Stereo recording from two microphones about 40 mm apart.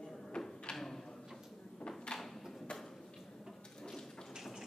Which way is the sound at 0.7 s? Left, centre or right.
Centre.